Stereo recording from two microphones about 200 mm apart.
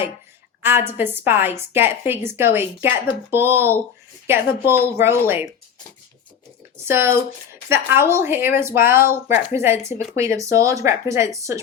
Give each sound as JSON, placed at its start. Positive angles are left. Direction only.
{"t": 0.6, "sound": "a woman's voice", "side_deg": -10}
{"t": 6.8, "sound": "a woman's voice", "side_deg": -10}